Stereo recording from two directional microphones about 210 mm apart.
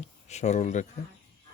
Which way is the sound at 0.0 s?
30° left (ahead or behind).